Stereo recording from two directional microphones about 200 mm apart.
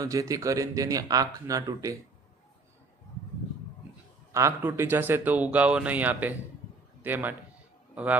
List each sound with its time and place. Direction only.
0.0 s speech: 15° right (ahead or behind)
4.3 s a man's voice: 15° right (ahead or behind)